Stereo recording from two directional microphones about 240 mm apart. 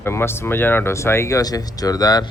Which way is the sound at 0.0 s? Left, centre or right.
Centre.